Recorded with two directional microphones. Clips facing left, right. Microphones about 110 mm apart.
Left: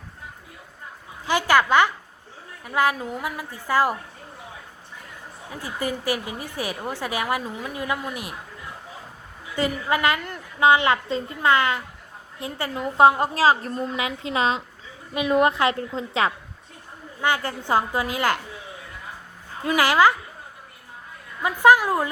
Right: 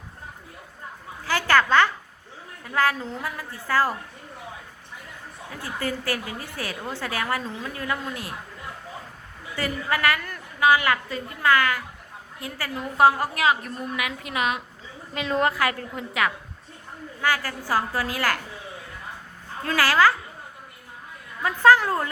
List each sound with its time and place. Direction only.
1.2 s a sound: 15° left (ahead or behind)
2.6 s a woman's voice: 15° left (ahead or behind)
5.5 s a woman's voice: 15° left (ahead or behind)
9.6 s a woman's voice: 20° left (ahead or behind)
15.1 s a woman's voice: 15° left (ahead or behind)
19.6 s a woman's voice: 20° left (ahead or behind)
21.4 s a woman's voice: 15° left (ahead or behind)